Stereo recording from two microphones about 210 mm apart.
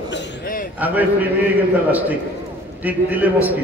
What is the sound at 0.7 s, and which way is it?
A man's voice, 10° right (ahead or behind).